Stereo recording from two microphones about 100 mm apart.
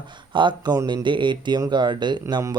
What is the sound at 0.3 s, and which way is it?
Speech, 50° right (ahead or behind).